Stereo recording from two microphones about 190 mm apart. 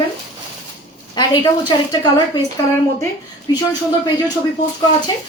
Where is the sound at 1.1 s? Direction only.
20° left (ahead or behind).